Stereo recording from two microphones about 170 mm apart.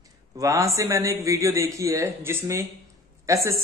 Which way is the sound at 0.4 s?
20° right (ahead or behind).